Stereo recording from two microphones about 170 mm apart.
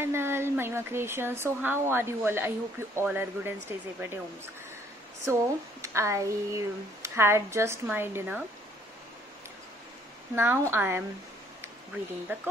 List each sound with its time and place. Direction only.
0.0 s speech: 15° right (ahead or behind)
5.2 s speech: 15° right (ahead or behind)
10.3 s speech: 15° right (ahead or behind)
12.3 s speech: 10° right (ahead or behind)